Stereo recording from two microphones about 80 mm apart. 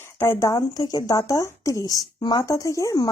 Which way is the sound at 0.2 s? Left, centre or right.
Left.